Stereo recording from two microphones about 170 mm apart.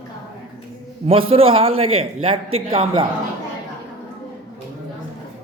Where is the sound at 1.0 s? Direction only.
35° right (ahead or behind).